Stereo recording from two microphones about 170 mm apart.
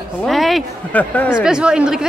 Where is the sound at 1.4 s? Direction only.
5° right (ahead or behind).